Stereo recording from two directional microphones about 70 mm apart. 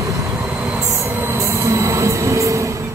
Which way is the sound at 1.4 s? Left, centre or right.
Right.